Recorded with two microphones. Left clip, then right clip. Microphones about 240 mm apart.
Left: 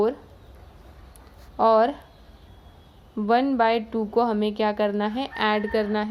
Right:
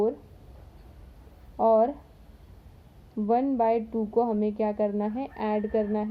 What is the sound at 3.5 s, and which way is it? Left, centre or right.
A woman's voice, left.